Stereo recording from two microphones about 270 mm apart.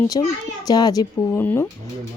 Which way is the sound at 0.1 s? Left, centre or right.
Centre.